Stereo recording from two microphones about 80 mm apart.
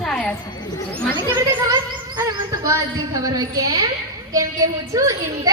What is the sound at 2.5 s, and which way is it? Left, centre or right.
A woman's voice, right.